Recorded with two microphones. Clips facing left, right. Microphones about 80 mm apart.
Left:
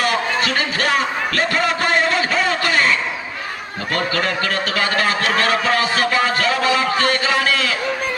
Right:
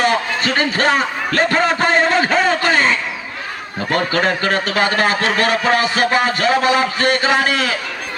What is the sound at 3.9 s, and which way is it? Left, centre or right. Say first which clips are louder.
Speech: right 3 dB; right.